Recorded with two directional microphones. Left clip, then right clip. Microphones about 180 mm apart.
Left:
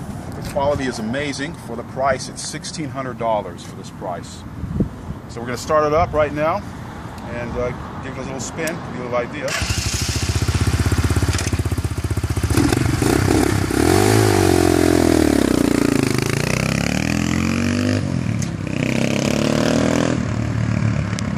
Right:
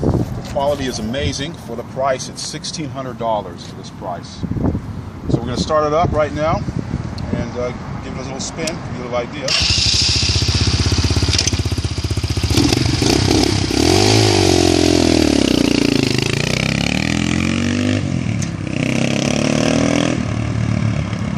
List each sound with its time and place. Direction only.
0.6 s speech: 5° right (ahead or behind)
0.8 s speech: 25° right (ahead or behind)
3.0 s speech: centre (ahead or behind)
5.5 s speech: 5° left (ahead or behind)
8.5 s speech: 5° left (ahead or behind)
12.5 s motorcycle: centre (ahead or behind)